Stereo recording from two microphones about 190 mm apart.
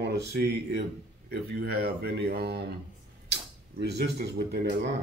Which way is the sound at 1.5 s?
60° right (ahead or behind).